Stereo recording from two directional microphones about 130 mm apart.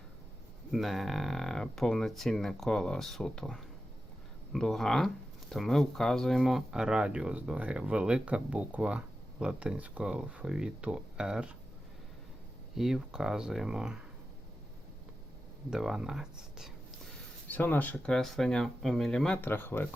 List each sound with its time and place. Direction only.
0.7 s speech: centre (ahead or behind)
12.7 s speech: 5° right (ahead or behind)
15.7 s speech: 5° right (ahead or behind)
17.5 s speech: 15° left (ahead or behind)